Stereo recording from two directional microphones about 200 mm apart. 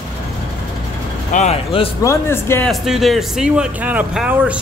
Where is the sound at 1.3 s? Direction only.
35° left (ahead or behind).